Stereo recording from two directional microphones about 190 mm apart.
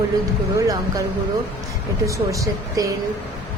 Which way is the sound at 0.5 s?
15° right (ahead or behind).